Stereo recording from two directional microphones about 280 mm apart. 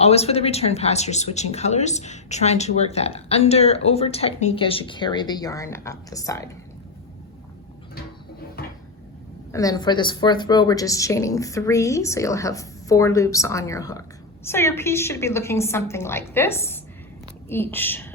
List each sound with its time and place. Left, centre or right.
0.0 s speech: left
9.5 s a woman's voice: centre